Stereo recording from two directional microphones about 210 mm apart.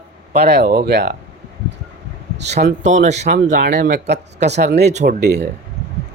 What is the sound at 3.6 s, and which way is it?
Speech, 50° right (ahead or behind).